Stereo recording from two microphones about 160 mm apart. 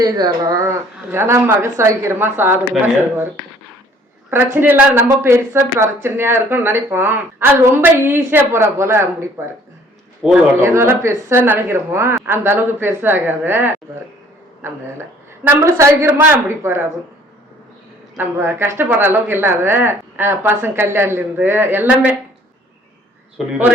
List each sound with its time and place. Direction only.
0.0 s speech: 25° right (ahead or behind)
4.5 s speech: 10° right (ahead or behind)
15.4 s speech: 15° right (ahead or behind)
18.2 s speech: 15° right (ahead or behind)